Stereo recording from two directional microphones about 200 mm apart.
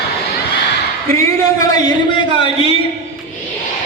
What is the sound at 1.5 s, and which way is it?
A man's voice, 20° left (ahead or behind).